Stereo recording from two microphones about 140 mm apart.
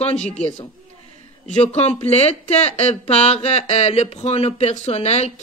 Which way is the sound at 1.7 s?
50° left (ahead or behind).